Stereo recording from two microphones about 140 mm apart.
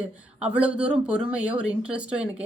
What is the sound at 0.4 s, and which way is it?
A woman's voice, 10° right (ahead or behind).